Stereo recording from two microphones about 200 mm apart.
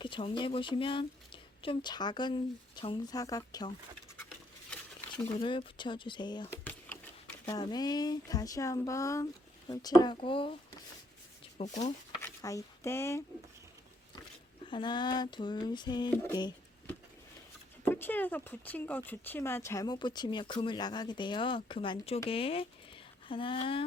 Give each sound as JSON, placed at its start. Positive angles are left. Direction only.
{"t": 0.0, "sound": "speech", "side_deg": 25}
{"t": 5.4, "sound": "speech", "side_deg": 25}
{"t": 6.7, "sound": "a sound", "side_deg": 10}
{"t": 7.4, "sound": "speech", "side_deg": 20}
{"t": 11.4, "sound": "a sound", "side_deg": 25}
{"t": 12.2, "sound": "speech", "side_deg": 15}
{"t": 14.6, "sound": "speech", "side_deg": 25}
{"t": 17.8, "sound": "speech", "side_deg": 10}